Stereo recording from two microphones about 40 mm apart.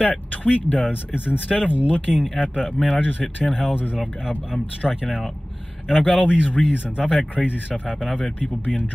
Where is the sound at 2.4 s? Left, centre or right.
Right.